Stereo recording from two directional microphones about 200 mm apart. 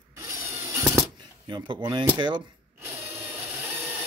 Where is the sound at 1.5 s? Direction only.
25° right (ahead or behind).